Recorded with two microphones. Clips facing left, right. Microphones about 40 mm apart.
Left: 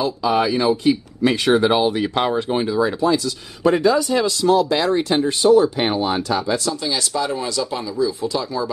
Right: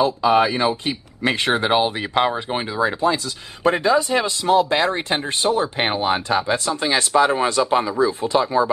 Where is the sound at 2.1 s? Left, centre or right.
Centre.